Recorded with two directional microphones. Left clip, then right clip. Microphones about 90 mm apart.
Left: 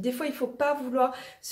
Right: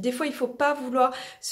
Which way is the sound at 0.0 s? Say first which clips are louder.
Right 3 dB; 15° right (ahead or behind).